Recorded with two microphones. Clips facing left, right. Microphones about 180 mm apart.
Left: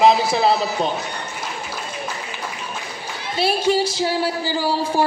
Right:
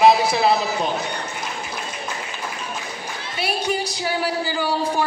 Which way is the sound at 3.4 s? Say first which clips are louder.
Left 6 dB; 25° left (ahead or behind).